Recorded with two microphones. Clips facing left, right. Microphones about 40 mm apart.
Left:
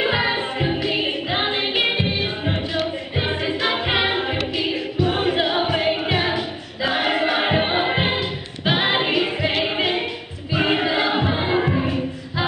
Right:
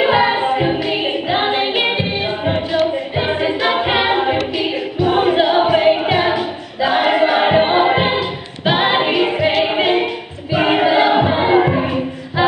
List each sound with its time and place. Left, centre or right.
0.0 s music: centre
3.4 s a capella: centre
4.6 s music: centre
7.0 s choir: centre
9.7 s a capella: centre
10.5 s music: right